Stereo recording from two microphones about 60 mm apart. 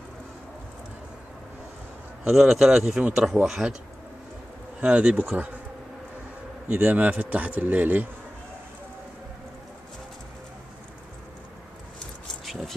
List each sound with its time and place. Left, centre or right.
2.2 s speech: centre
4.7 s speech: right
6.7 s speech: right
12.4 s a sound: centre